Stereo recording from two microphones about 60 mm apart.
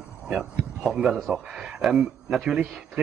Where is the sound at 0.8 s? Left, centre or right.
Centre.